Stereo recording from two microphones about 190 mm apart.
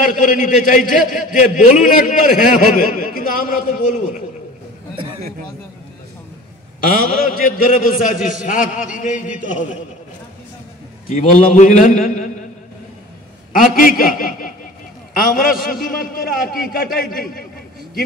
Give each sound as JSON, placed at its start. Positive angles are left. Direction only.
{"t": 0.0, "sound": "a man's voice", "side_deg": 45}
{"t": 4.9, "sound": "a sound", "side_deg": -30}
{"t": 6.8, "sound": "a man's voice", "side_deg": 45}
{"t": 11.1, "sound": "a man's voice", "side_deg": 45}
{"t": 13.5, "sound": "a man's voice", "side_deg": 45}